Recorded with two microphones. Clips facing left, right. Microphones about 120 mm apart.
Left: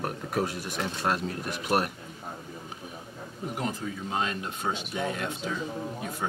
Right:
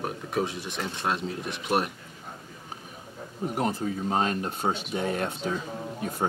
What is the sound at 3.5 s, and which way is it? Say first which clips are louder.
Speech: right 5 dB; 40° right (ahead or behind).